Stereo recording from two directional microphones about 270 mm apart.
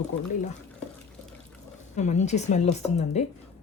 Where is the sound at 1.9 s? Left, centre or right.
Left.